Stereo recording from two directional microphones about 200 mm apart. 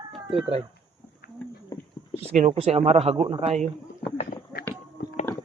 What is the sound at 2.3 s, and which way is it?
Speech, 35° right (ahead or behind).